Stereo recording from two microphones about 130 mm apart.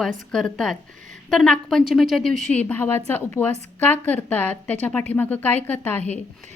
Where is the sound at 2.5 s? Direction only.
15° left (ahead or behind).